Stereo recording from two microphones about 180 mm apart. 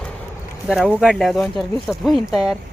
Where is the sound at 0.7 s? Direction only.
5° right (ahead or behind).